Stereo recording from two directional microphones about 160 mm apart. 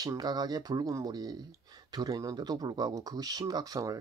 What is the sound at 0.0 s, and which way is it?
Speech, 25° right (ahead or behind).